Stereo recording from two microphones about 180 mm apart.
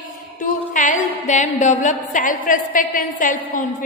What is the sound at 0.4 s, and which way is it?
A woman's voice, 45° left (ahead or behind).